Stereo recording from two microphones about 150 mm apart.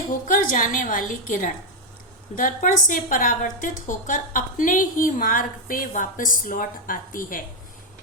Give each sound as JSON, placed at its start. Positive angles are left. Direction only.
{"t": 0.3, "sound": "a woman's voice", "side_deg": 65}